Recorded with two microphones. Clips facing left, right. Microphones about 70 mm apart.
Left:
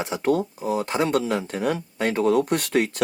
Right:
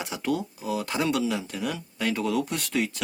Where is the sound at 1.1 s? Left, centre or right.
Left.